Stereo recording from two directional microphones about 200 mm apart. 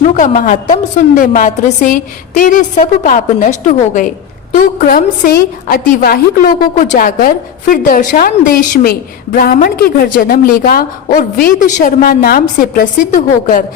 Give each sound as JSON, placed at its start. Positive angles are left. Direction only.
{"t": 0.1, "sound": "a woman's voice", "side_deg": 40}